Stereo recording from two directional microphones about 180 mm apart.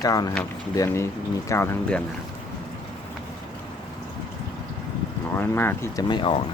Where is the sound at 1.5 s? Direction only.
15° left (ahead or behind).